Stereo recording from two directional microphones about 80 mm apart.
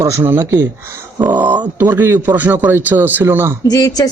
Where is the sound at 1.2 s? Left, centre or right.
Right.